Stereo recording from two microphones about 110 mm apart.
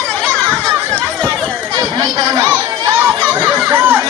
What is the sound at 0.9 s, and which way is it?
Chatter, 10° left (ahead or behind).